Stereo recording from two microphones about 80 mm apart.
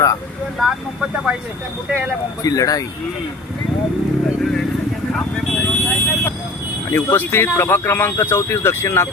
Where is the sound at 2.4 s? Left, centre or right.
Left.